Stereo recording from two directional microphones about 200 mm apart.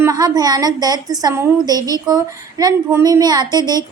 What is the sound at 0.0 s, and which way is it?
A woman's voice, 20° right (ahead or behind).